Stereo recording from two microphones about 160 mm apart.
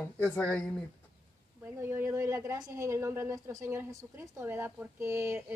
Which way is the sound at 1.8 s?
15° right (ahead or behind).